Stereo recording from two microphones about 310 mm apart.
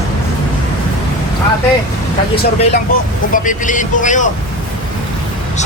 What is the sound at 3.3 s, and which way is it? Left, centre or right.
Speech, left.